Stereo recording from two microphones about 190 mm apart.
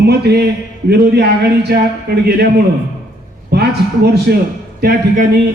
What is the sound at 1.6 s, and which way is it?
Speech, 55° right (ahead or behind).